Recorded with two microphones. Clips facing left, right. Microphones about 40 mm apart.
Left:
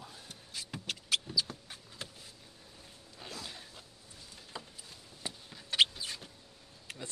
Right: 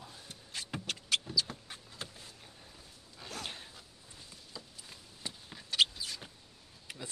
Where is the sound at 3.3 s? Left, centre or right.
Right.